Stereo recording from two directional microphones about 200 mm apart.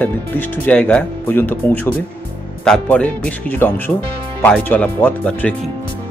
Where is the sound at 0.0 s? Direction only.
10° left (ahead or behind).